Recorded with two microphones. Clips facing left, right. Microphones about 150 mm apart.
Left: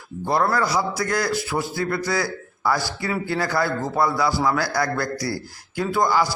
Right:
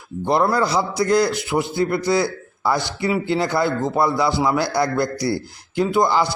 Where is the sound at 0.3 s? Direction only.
20° right (ahead or behind).